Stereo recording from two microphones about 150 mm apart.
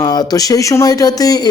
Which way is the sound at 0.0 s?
25° left (ahead or behind).